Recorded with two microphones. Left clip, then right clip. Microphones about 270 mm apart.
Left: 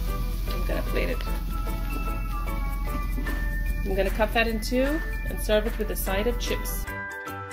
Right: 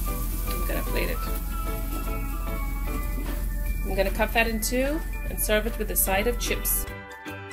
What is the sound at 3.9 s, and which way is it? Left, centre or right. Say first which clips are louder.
Speech: even; centre.